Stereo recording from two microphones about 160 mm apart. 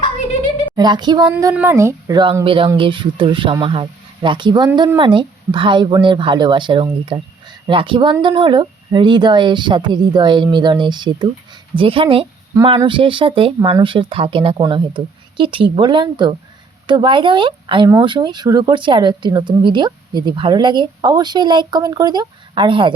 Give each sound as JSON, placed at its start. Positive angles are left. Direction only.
{"t": 0.8, "sound": "speech", "side_deg": -25}